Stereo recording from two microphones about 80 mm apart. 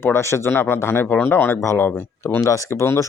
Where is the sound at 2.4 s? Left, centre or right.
Left.